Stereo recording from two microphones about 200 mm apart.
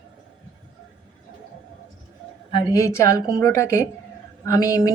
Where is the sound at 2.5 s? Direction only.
20° left (ahead or behind).